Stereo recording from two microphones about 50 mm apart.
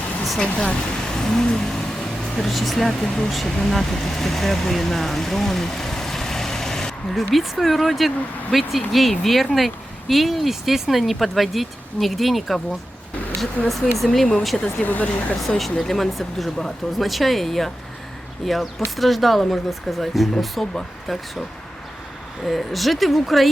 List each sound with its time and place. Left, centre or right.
0.3 s speech: centre
14.8 s speech: left
15.4 s speech: centre
22.4 s speech: centre